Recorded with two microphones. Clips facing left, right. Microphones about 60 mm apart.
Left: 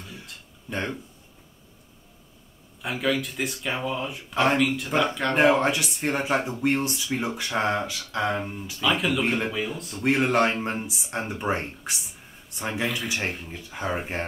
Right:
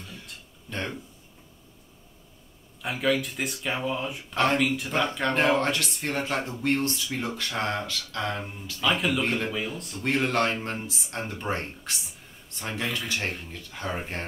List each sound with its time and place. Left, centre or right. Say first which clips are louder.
0.7 s speech: left 3 dB; centre
2.8 s speech: even; centre
5.3 s speech: left 4 dB; centre
8.8 s speech: left 1 dB; centre
9.9 s speech: left 4 dB; centre